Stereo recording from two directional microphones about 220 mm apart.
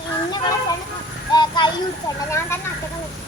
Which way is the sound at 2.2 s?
10° left (ahead or behind).